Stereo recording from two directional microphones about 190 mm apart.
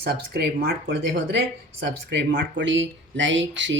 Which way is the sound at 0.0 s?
60° right (ahead or behind).